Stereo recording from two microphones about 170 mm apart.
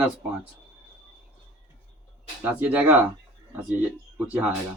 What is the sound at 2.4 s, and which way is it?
Speech, 10° right (ahead or behind).